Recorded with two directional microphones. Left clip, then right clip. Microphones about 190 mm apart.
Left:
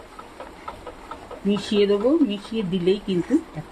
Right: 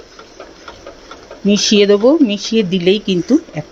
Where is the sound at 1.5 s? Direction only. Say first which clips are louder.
Right 10 dB; 35° right (ahead or behind).